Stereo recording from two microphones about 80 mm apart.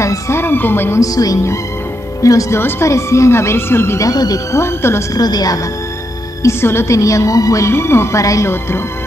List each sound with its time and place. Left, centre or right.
0.0 s speech: left
0.9 s a woman's voice: left
4.1 s a woman's voice: left
4.6 s a woman's voice: left
5.1 s a woman's voice: left
6.4 s a woman's voice: left